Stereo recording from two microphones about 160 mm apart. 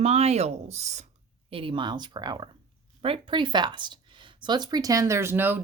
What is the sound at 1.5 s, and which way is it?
Speech, 35° right (ahead or behind).